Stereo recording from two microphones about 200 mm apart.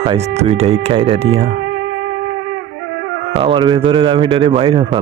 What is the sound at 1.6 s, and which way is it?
Music, 70° right (ahead or behind).